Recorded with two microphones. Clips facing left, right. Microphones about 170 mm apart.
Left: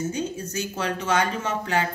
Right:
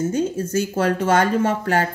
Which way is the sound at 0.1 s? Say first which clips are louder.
Right 8 dB; 50° right (ahead or behind).